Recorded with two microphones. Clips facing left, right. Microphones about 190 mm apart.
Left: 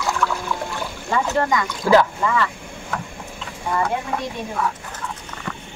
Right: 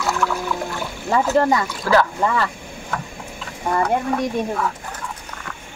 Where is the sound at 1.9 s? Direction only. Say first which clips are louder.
Left 2 dB; 20° left (ahead or behind).